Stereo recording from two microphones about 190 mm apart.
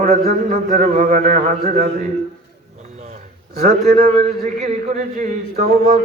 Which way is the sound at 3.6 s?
50° right (ahead or behind).